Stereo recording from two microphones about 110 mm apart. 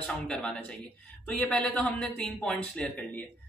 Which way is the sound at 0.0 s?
5° left (ahead or behind).